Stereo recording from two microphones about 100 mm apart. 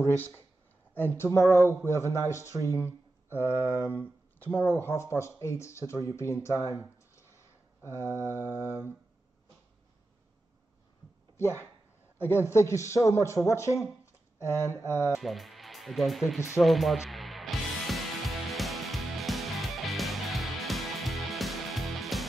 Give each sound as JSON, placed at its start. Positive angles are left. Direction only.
{"t": 0.0, "sound": "speech", "side_deg": 20}
{"t": 1.5, "sound": "a man's voice", "side_deg": 30}
{"t": 7.2, "sound": "a sound", "side_deg": 30}
{"t": 12.2, "sound": "speech", "side_deg": 25}
{"t": 15.1, "sound": "speech", "side_deg": 0}
{"t": 16.6, "sound": "music", "side_deg": 0}